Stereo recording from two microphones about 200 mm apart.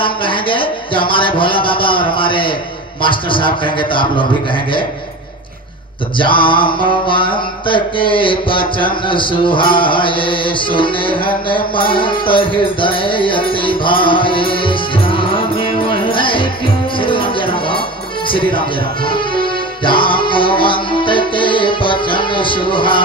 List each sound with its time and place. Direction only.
0.0 s a sound: 25° left (ahead or behind)
3.0 s mantra: 25° left (ahead or behind)
6.1 s mantra: 25° left (ahead or behind)
17.0 s music: 25° left (ahead or behind)
18.3 s mantra: 25° left (ahead or behind)
19.0 s music: 25° left (ahead or behind)